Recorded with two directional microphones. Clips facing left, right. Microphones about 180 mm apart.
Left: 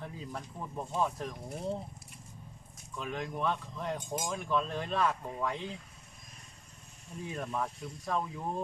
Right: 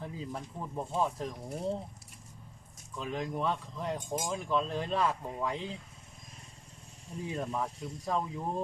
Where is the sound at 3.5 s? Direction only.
5° right (ahead or behind).